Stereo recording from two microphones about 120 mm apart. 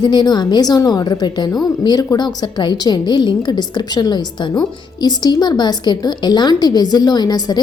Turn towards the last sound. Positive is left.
turn(degrees=35)  # may be behind; listen again after turning